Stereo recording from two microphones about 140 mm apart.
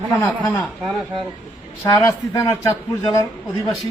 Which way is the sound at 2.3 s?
25° left (ahead or behind).